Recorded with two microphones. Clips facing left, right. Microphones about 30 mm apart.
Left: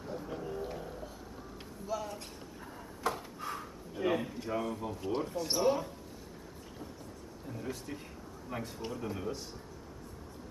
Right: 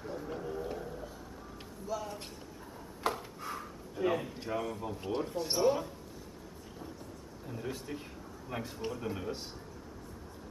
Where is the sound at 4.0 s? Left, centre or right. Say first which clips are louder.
Even; centre.